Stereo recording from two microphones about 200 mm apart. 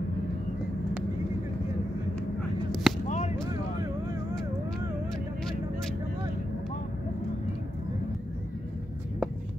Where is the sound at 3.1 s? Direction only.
35° left (ahead or behind).